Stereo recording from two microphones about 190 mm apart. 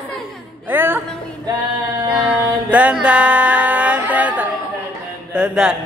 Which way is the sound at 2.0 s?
5° right (ahead or behind).